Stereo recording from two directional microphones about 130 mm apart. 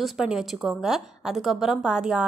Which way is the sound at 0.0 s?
5° right (ahead or behind).